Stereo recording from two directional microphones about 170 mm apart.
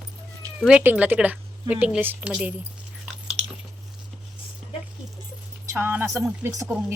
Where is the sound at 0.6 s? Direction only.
10° right (ahead or behind).